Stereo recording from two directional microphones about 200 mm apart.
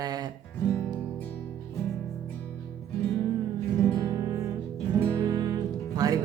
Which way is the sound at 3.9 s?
20° right (ahead or behind).